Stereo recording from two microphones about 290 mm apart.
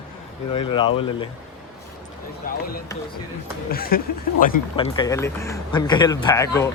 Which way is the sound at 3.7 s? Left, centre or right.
Left.